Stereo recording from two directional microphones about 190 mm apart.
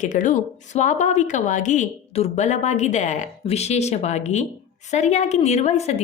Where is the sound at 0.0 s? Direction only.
40° left (ahead or behind).